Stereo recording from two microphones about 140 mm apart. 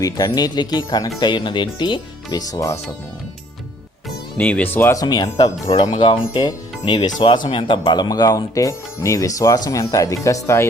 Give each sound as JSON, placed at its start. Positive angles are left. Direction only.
{"t": 0.0, "sound": "speech", "side_deg": 30}
{"t": 4.4, "sound": "speech", "side_deg": 10}